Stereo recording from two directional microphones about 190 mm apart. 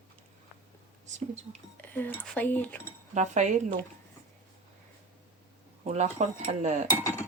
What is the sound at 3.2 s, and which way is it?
Speech, 40° right (ahead or behind).